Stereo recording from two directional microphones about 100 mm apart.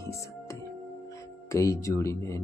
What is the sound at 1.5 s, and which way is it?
Speech, 30° left (ahead or behind).